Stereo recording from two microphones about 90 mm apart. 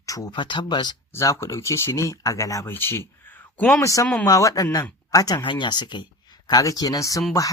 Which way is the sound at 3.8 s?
35° left (ahead or behind).